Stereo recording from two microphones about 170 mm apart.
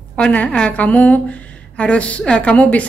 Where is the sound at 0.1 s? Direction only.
5° left (ahead or behind).